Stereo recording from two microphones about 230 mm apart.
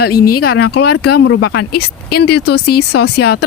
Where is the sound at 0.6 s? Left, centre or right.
Left.